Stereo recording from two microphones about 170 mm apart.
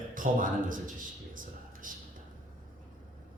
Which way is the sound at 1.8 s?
50° right (ahead or behind).